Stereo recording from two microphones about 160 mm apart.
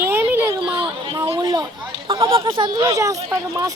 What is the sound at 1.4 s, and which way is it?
Speech, 25° right (ahead or behind).